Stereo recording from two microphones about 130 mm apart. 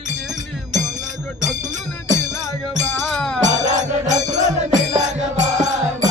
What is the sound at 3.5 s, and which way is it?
Music, 70° right (ahead or behind).